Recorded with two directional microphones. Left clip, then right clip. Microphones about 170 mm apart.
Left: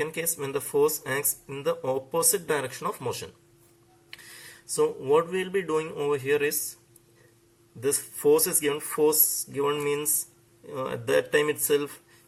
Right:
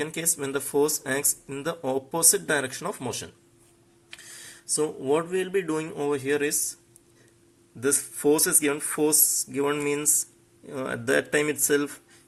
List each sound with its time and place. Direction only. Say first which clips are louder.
0.0 s speech: even; 30° right (ahead or behind)
4.7 s speech: left 2 dB; 30° right (ahead or behind)
7.8 s speech: right 1 dB; 25° right (ahead or behind)